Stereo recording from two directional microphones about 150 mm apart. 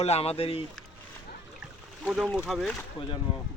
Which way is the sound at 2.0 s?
5° right (ahead or behind).